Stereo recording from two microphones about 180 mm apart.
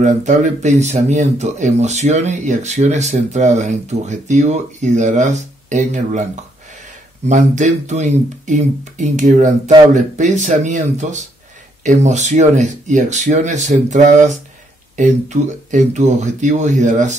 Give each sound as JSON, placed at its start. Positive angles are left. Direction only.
{"t": 0.0, "sound": "speech", "side_deg": -40}
{"t": 7.2, "sound": "speech", "side_deg": -40}